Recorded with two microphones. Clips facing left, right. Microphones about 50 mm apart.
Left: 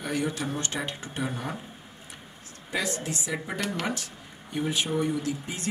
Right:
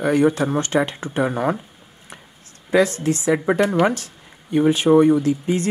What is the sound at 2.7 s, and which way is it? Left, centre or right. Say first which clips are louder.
A woman's voice: right 13 dB; right.